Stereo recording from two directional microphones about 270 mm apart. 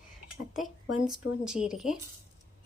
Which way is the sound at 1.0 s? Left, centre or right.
Centre.